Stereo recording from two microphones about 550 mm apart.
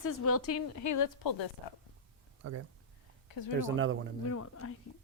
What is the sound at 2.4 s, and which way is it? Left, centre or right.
Speech, right.